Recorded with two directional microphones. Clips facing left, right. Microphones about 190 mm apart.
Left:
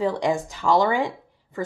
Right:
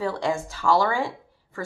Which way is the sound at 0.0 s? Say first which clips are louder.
Left 3 dB; 15° left (ahead or behind).